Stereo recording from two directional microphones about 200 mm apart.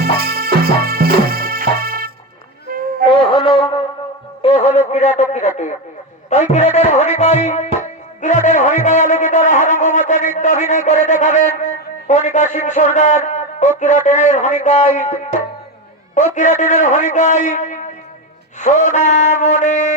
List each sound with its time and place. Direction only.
0.0 s music: 50° right (ahead or behind)
2.7 s a sound: 45° right (ahead or behind)
3.0 s shofar: 25° left (ahead or behind)
4.4 s music: 30° left (ahead or behind)
4.9 s a sound: 35° left (ahead or behind)
6.5 s music: 35° left (ahead or behind)
16.1 s a man's voice: 35° left (ahead or behind)